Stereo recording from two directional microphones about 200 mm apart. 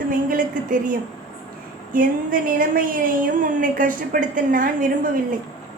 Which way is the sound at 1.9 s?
45° right (ahead or behind).